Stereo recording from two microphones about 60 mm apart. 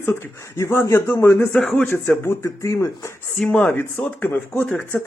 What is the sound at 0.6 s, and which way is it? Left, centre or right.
Speech, left.